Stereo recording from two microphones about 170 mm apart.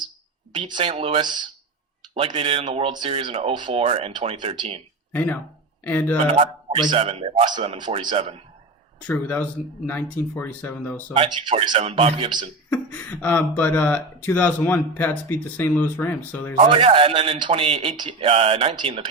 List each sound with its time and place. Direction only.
0.5 s a man's voice: 30° right (ahead or behind)
2.9 s speech: 30° right (ahead or behind)
3.7 s a man's voice: 40° right (ahead or behind)
5.1 s speech: 10° left (ahead or behind)
6.7 s a man's voice: 35° right (ahead or behind)
9.0 s speech: 10° left (ahead or behind)
11.1 s a man's voice: 30° right (ahead or behind)
12.7 s speech: 10° left (ahead or behind)
16.6 s a man's voice: 35° right (ahead or behind)